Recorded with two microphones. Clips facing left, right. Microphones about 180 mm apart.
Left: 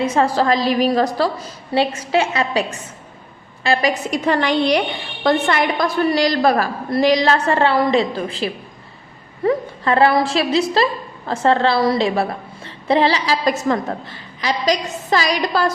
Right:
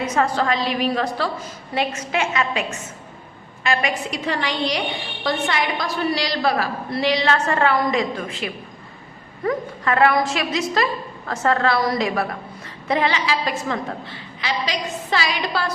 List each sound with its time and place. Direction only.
0.0 s a woman's voice: 30° left (ahead or behind)